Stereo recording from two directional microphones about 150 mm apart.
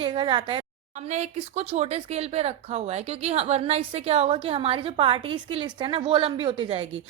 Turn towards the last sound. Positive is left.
turn(degrees=-35)  # may be behind; listen again after turning